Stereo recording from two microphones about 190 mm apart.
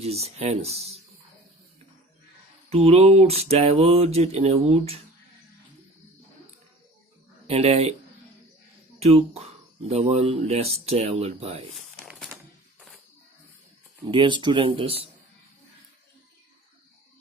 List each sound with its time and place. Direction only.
0.0 s speech: 35° right (ahead or behind)
2.6 s speech: 35° right (ahead or behind)
7.4 s speech: 35° right (ahead or behind)
9.0 s speech: 35° right (ahead or behind)
12.0 s a sound: centre (ahead or behind)
14.1 s speech: 25° right (ahead or behind)